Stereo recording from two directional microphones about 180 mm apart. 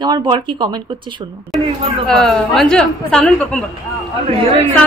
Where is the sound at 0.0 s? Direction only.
25° right (ahead or behind).